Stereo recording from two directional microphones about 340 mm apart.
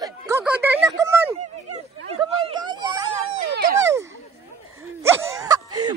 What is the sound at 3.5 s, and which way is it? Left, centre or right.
Speech, right.